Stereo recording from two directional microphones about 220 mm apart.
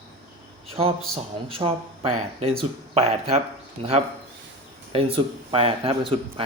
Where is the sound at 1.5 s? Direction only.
25° right (ahead or behind).